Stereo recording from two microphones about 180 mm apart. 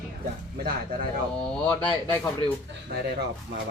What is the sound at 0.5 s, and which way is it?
Speech, 55° right (ahead or behind).